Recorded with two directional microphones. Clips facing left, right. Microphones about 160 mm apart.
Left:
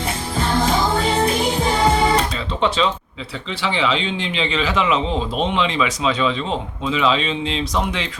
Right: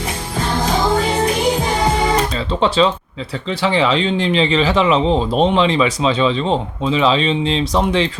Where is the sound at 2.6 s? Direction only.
35° right (ahead or behind).